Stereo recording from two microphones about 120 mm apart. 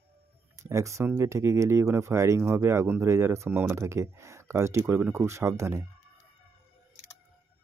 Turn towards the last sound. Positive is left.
turn(degrees=-25)  # may be behind; listen again after turning